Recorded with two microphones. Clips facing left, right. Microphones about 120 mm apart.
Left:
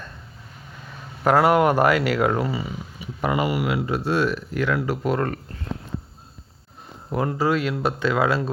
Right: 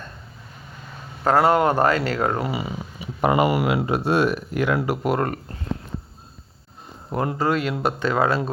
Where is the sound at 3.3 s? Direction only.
45° right (ahead or behind).